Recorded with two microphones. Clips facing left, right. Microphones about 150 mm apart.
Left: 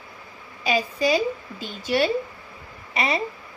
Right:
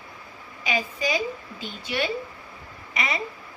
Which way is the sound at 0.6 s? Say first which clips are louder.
Left 5 dB; 35° left (ahead or behind).